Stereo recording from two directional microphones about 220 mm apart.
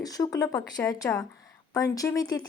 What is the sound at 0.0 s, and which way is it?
Speech, 15° left (ahead or behind).